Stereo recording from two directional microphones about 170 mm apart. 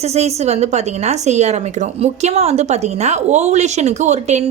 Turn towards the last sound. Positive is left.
turn(degrees=-40)  # may be behind; listen again after turning